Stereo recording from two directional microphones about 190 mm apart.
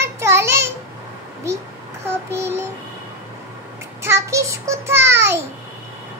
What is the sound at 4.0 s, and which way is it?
Child singing, 15° right (ahead or behind).